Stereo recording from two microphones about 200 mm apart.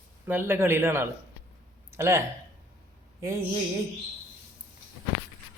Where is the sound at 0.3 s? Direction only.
10° right (ahead or behind).